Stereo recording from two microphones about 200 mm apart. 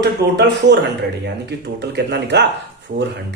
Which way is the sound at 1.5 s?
55° right (ahead or behind).